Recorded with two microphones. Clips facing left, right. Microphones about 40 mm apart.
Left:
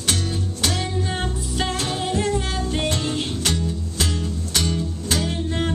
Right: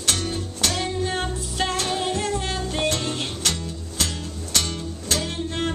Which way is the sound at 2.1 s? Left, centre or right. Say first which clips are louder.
Left 3 dB; centre.